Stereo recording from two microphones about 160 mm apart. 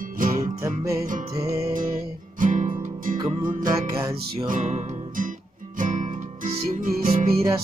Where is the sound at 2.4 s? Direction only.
55° right (ahead or behind).